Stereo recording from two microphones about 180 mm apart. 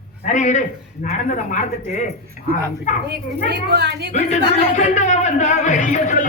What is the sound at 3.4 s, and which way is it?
Speech, 65° right (ahead or behind).